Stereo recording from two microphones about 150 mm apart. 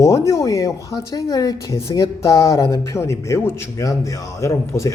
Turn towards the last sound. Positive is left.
turn(degrees=20)  # may be behind; listen again after turning